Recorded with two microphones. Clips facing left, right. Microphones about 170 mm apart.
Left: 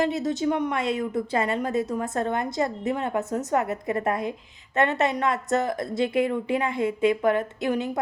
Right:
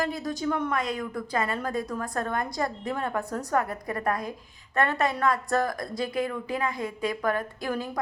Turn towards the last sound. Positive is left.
turn(degrees=25)  # may be behind; listen again after turning